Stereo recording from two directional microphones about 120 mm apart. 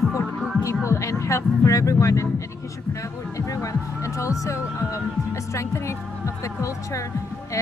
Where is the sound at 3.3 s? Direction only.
25° left (ahead or behind).